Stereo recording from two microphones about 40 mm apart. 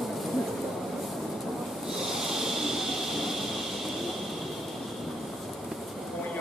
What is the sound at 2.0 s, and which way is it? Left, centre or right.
Vehicle, centre.